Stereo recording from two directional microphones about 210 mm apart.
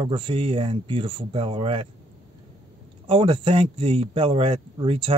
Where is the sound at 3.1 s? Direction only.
25° right (ahead or behind).